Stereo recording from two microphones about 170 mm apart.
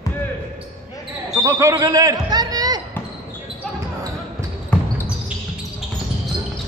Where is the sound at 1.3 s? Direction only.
20° right (ahead or behind).